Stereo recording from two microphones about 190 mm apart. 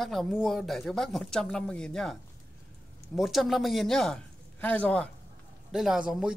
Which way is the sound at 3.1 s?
Centre (ahead or behind).